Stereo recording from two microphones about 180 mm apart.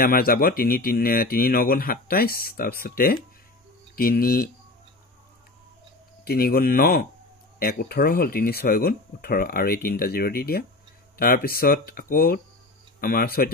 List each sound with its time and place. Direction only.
0.0 s speech: 55° left (ahead or behind)
6.2 s speech: 55° left (ahead or behind)